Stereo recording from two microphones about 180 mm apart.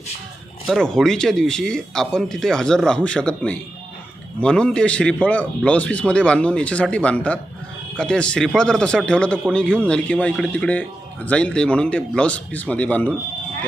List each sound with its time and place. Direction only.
0.7 s a man's voice: centre (ahead or behind)